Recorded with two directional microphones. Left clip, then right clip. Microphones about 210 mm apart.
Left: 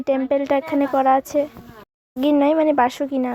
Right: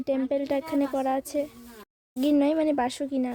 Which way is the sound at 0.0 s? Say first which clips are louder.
Left 7 dB; centre (ahead or behind).